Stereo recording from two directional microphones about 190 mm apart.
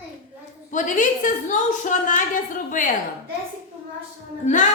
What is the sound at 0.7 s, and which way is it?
Speech, 40° left (ahead or behind).